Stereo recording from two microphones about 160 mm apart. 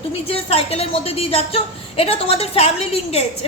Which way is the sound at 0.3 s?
40° left (ahead or behind).